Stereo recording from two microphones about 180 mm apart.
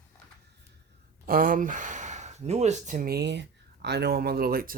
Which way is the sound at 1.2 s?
50° right (ahead or behind).